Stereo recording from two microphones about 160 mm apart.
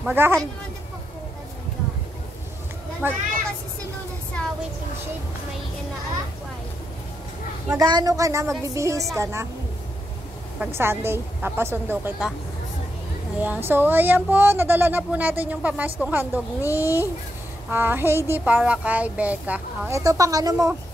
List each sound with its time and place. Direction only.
0.0 s speech: 15° right (ahead or behind)
3.0 s speech: 10° right (ahead or behind)
7.7 s a woman's voice: 25° right (ahead or behind)
10.8 s speech: 15° right (ahead or behind)
13.4 s speech: 10° right (ahead or behind)
20.0 s a woman's voice: 20° right (ahead or behind)